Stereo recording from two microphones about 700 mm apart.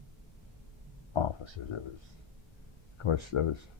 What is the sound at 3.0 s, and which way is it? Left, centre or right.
Speech, left.